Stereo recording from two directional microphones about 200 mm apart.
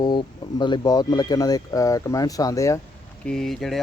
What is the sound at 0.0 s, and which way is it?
Speech, 20° left (ahead or behind).